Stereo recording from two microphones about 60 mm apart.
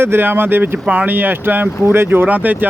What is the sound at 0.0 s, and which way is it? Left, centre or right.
Speech, right.